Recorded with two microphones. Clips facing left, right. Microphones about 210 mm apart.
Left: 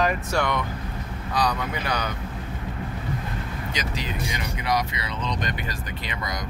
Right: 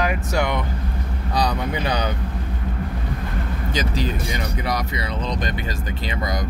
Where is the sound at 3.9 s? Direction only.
40° right (ahead or behind).